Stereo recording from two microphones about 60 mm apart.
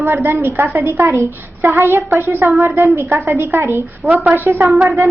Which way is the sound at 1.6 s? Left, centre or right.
Right.